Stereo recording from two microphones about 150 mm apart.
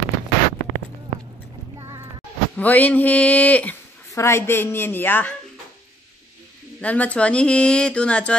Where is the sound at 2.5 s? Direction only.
10° left (ahead or behind).